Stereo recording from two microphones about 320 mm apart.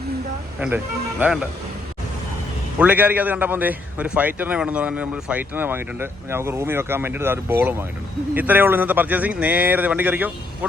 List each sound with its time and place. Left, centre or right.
0.6 s a man's voice: centre
2.7 s a man's voice: centre